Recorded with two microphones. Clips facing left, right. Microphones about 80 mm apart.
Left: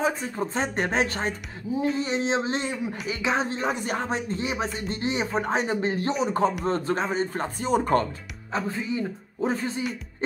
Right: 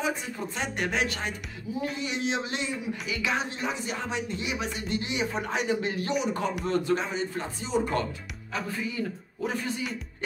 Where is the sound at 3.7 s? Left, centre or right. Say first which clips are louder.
Left 4 dB; left.